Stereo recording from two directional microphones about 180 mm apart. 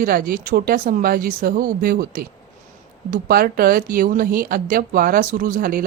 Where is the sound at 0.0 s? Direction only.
50° right (ahead or behind).